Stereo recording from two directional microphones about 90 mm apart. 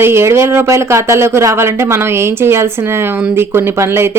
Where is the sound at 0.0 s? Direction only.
30° right (ahead or behind).